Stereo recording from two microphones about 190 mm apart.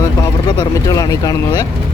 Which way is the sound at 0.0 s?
20° left (ahead or behind).